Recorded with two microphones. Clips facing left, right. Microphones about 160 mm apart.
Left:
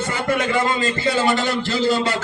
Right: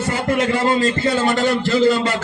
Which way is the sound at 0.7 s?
40° right (ahead or behind).